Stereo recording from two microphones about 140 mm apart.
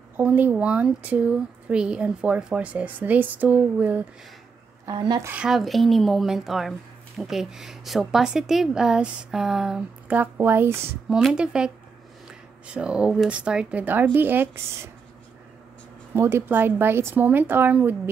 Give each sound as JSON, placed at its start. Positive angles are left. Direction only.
{"t": 0.2, "sound": "speech", "side_deg": -10}
{"t": 4.8, "sound": "a woman's voice", "side_deg": -30}
{"t": 5.2, "sound": "a woman's voice", "side_deg": -10}
{"t": 11.1, "sound": "a woman's voice", "side_deg": -5}
{"t": 16.2, "sound": "speech", "side_deg": -20}